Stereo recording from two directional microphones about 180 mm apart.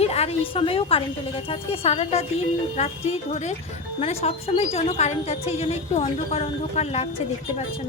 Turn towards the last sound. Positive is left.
turn(degrees=35)  # may be behind; listen again after turning